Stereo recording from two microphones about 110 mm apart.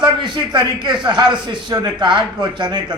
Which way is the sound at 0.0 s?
40° right (ahead or behind).